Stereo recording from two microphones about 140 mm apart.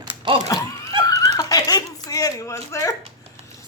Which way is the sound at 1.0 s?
25° left (ahead or behind).